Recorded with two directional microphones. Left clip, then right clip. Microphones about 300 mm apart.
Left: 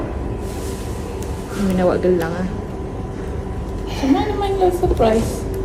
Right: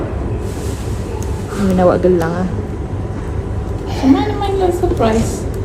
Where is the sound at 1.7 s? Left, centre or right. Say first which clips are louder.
Right 5 dB; centre.